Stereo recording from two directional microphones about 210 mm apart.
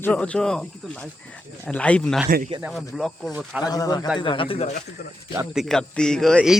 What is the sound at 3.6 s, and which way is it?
Speech, 20° left (ahead or behind).